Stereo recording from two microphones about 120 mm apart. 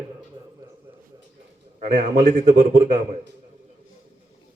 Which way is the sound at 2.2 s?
90° right.